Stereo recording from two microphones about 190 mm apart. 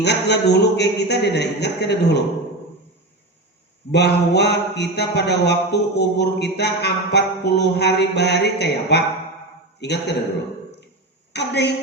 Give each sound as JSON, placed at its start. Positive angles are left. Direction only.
{"t": 0.0, "sound": "a man's voice", "side_deg": 60}
{"t": 3.9, "sound": "a man's voice", "side_deg": 60}
{"t": 11.3, "sound": "a man's voice", "side_deg": 60}